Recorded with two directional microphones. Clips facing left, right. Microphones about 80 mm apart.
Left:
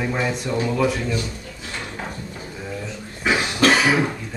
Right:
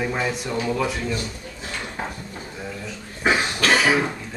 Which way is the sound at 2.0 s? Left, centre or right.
Right.